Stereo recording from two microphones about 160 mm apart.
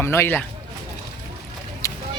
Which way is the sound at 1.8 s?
20° left (ahead or behind).